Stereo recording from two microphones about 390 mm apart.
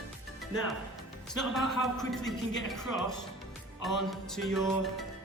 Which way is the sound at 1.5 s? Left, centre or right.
Centre.